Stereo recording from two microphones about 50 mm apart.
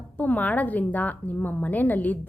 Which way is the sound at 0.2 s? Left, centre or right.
Left.